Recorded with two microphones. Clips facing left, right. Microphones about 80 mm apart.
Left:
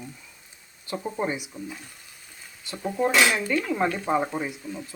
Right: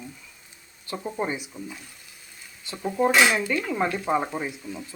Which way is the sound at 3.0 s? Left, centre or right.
Centre.